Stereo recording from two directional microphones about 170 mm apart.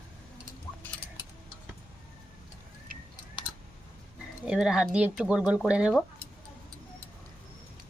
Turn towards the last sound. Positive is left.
turn(degrees=-5)  # may be behind; listen again after turning